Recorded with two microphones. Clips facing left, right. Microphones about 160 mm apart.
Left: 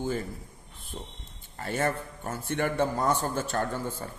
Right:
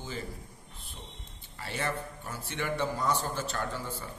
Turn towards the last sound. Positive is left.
turn(degrees=50)  # may be behind; listen again after turning